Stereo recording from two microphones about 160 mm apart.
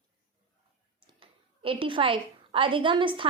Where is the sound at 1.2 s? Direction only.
35° right (ahead or behind).